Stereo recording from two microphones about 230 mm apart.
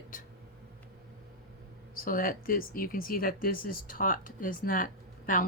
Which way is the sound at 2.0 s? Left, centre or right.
Left.